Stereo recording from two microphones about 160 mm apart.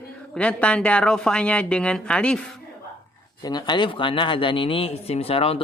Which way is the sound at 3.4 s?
25° left (ahead or behind).